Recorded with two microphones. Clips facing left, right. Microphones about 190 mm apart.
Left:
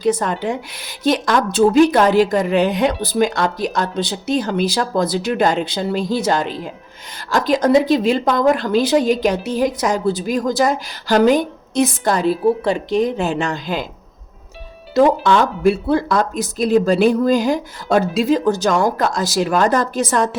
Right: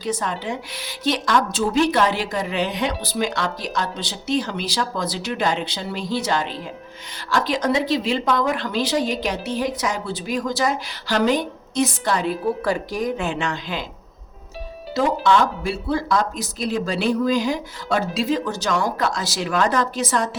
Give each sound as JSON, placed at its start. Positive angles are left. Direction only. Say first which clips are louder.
{"t": 0.1, "sound": "speech", "louder": "left 5 dB", "side_deg": 55}
{"t": 12.6, "sound": "speech", "louder": "left 5 dB", "side_deg": 25}
{"t": 14.9, "sound": "speech", "louder": "left 5 dB", "side_deg": 55}